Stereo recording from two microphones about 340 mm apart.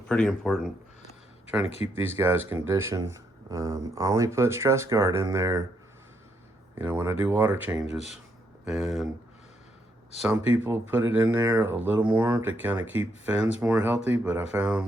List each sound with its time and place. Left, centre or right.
0.1 s speech: centre
1.6 s speech: centre
2.0 s speech: centre
6.7 s speech: centre
7.9 s speech: centre
8.6 s speech: centre
10.2 s speech: centre